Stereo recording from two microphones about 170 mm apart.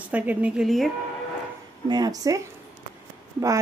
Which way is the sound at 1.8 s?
25° right (ahead or behind).